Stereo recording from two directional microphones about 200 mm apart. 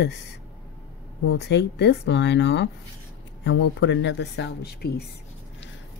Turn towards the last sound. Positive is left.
turn(degrees=50)  # may be behind; listen again after turning